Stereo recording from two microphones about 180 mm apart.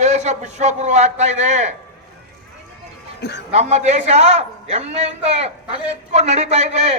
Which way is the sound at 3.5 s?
40° right (ahead or behind).